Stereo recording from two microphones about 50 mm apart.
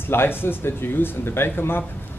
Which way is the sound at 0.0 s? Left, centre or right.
Left.